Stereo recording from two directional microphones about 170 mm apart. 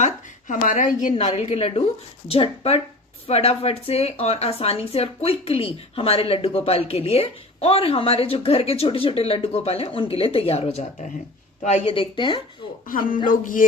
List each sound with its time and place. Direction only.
0.0 s a woman's voice: 50° left (ahead or behind); by 12.4 s 30° left (ahead or behind)
12.9 s speech: 55° left (ahead or behind)
13.2 s music: 55° left (ahead or behind)